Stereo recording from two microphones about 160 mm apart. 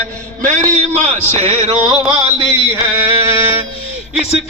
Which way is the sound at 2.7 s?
15° right (ahead or behind).